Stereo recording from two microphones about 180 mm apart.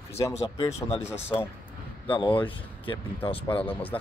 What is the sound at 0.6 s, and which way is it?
Speech, 15° left (ahead or behind).